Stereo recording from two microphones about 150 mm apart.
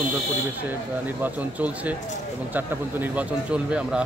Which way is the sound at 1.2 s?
10° right (ahead or behind).